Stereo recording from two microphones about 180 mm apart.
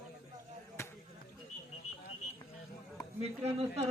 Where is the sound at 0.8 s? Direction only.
15° left (ahead or behind).